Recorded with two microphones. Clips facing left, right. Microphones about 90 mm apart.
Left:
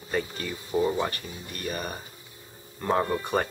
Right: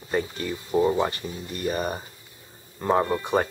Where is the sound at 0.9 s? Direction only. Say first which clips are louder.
Right 4 dB; 20° right (ahead or behind).